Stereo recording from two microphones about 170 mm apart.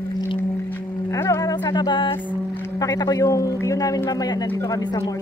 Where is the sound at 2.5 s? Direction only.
15° left (ahead or behind).